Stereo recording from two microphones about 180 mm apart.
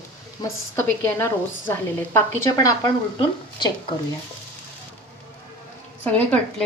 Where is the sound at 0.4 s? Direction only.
20° left (ahead or behind).